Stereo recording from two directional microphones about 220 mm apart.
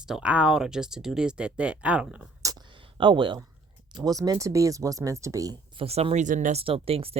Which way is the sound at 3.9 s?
15° right (ahead or behind).